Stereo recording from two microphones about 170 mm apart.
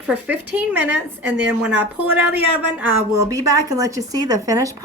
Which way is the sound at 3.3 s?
20° right (ahead or behind).